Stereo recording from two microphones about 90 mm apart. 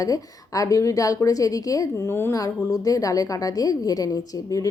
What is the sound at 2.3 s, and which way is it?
A woman's voice, 40° left (ahead or behind).